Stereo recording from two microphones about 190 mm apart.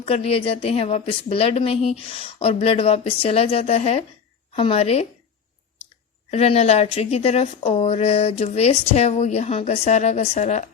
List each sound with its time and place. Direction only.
0.0 s speech: 30° left (ahead or behind)
6.3 s speech: 35° left (ahead or behind)